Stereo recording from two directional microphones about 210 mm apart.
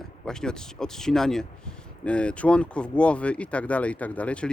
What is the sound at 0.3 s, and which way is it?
Speech, 5° left (ahead or behind).